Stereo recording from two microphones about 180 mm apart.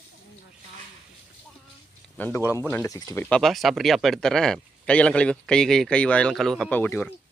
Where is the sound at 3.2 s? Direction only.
5° left (ahead or behind).